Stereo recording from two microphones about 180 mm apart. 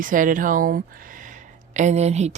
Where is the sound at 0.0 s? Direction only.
50° right (ahead or behind).